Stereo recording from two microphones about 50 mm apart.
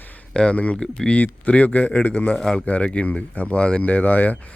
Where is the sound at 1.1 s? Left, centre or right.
Left.